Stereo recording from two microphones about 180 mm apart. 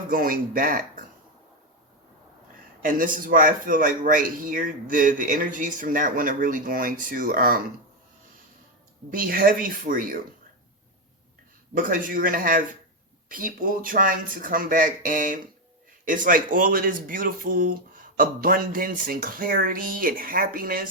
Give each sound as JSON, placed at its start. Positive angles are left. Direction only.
{"t": 0.1, "sound": "speech", "side_deg": -50}
{"t": 2.8, "sound": "speech", "side_deg": -50}
{"t": 9.0, "sound": "speech", "side_deg": -50}
{"t": 11.7, "sound": "speech", "side_deg": -50}